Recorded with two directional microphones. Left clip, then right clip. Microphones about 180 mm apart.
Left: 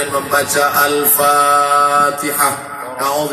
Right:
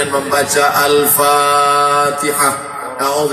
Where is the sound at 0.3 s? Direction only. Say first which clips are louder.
Right 1 dB; 30° left (ahead or behind).